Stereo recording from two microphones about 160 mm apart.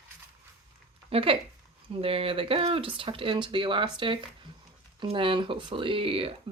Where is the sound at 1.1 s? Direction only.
35° right (ahead or behind).